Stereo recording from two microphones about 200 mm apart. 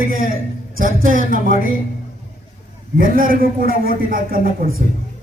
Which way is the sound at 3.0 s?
45° right (ahead or behind).